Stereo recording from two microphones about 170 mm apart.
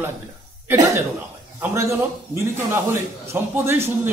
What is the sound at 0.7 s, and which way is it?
A man's voice, 15° right (ahead or behind).